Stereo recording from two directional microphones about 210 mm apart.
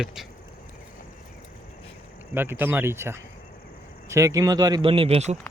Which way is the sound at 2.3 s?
10° right (ahead or behind).